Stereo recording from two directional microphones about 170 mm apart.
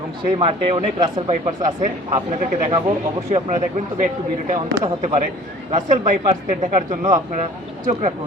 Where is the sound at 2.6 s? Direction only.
30° right (ahead or behind).